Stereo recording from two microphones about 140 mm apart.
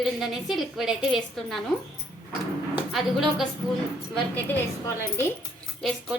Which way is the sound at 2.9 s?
Centre (ahead or behind).